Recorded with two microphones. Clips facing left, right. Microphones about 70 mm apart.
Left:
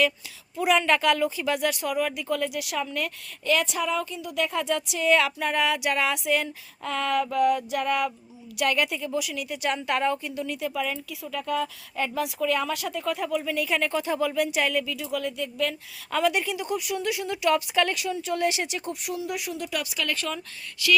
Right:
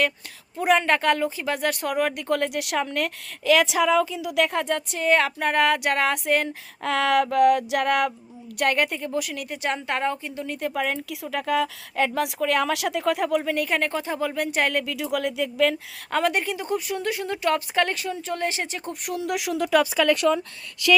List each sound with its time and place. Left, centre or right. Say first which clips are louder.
0.5 s speech: right 2 dB; right
4.6 s a sound: right 1 dB; right
6.5 s speech: right 5 dB; right
8.5 s a sound: right 2 dB; right
9.6 s a woman's voice: even; right
10.6 s a woman's voice: right 6 dB; right
13.4 s a woman's voice: right 2 dB; right
14.8 s speech: right 4 dB; right
16.1 s a woman's voice: right 1 dB; right
19.0 s a sound: right 6 dB; right
19.3 s speech: right 5 dB; right